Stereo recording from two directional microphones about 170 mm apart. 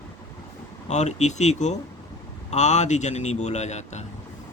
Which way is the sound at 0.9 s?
45° left (ahead or behind).